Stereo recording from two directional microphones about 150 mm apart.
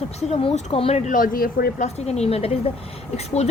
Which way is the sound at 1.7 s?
45° left (ahead or behind).